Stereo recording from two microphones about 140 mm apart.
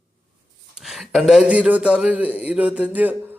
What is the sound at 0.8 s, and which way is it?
Speech, centre (ahead or behind).